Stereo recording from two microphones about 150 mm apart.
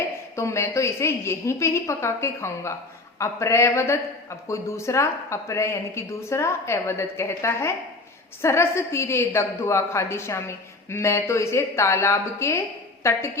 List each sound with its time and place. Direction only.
0.3 s a woman's voice: 20° left (ahead or behind)